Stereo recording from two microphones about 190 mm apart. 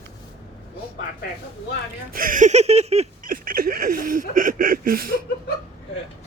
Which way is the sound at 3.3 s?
50° right (ahead or behind).